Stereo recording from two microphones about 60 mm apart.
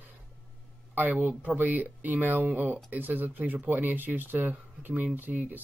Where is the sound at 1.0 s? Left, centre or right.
Right.